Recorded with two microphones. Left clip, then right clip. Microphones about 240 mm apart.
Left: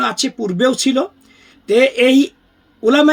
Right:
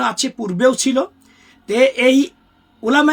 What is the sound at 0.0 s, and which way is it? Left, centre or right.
Speech, centre.